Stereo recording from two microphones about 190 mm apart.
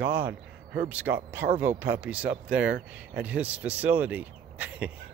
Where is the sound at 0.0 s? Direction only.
60° right (ahead or behind).